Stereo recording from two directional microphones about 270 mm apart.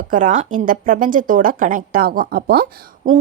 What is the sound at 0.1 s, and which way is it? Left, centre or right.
A woman's voice, right.